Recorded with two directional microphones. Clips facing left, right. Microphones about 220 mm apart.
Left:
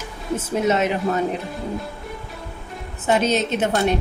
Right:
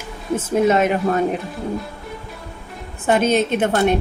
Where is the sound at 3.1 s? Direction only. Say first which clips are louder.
Right 3 dB; 55° right (ahead or behind).